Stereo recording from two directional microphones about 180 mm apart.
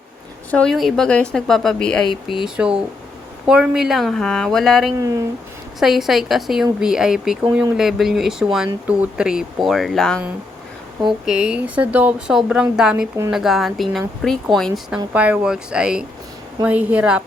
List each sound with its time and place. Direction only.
0.5 s speech: 5° left (ahead or behind)
4.9 s speech: 20° right (ahead or behind)
5.8 s speech: centre (ahead or behind)
11.3 s speech: 5° right (ahead or behind)